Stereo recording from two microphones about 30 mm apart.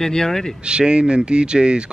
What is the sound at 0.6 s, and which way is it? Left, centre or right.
Speech, right.